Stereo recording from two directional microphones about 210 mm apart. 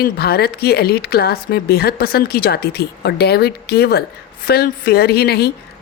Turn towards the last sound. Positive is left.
turn(degrees=50)  # may be behind; listen again after turning